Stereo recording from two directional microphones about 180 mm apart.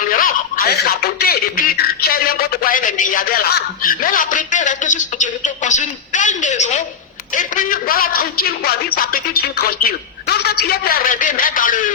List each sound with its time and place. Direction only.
0.1 s a man's voice: 50° left (ahead or behind)